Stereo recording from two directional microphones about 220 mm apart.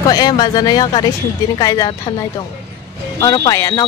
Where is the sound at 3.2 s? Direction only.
15° left (ahead or behind).